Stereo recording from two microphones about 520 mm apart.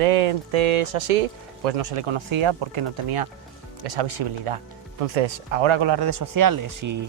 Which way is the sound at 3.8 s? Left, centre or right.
Right.